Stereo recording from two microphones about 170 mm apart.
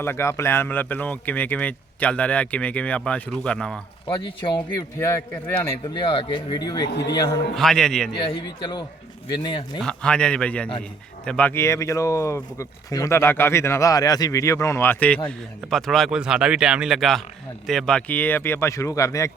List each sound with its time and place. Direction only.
0.0 s speech: 15° left (ahead or behind)
4.0 s speech: 25° left (ahead or behind)
4.9 s speech: 15° left (ahead or behind)
5.9 s speech: 30° left (ahead or behind)
6.9 s a man's voice: 80° left
7.5 s speech: centre (ahead or behind)
8.1 s speech: 25° left (ahead or behind)
9.8 s speech: 5° left (ahead or behind)